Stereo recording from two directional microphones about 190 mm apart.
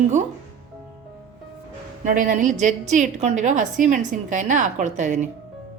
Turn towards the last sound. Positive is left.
turn(degrees=-40)  # may be behind; listen again after turning